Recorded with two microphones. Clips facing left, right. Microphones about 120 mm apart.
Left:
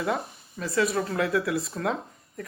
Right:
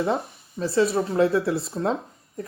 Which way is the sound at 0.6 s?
30° right (ahead or behind).